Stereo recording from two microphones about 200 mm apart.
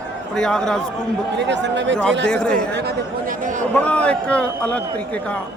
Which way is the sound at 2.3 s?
5° left (ahead or behind).